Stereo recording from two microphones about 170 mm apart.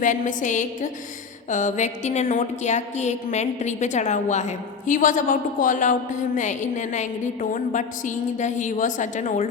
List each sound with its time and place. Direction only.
0.0 s a woman's voice: 50° left (ahead or behind)